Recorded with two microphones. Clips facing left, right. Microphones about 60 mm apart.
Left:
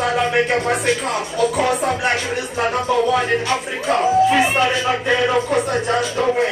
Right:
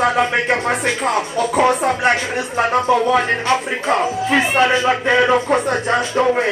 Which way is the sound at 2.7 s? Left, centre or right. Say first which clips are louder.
Right 3 dB; right.